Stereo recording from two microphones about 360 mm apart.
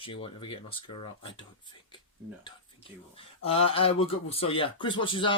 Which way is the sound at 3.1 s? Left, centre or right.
Centre.